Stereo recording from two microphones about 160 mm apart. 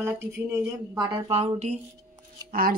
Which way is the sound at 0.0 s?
15° right (ahead or behind).